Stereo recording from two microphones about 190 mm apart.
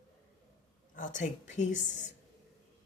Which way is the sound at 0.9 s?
40° left (ahead or behind).